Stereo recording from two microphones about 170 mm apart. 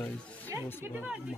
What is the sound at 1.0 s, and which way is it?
Speech, 5° right (ahead or behind).